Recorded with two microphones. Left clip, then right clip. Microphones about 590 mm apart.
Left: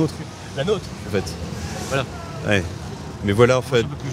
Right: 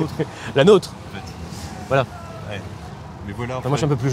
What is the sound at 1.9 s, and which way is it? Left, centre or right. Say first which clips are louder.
Speech: right 5 dB; right.